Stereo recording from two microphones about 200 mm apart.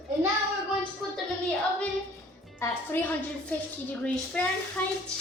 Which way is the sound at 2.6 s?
10° left (ahead or behind).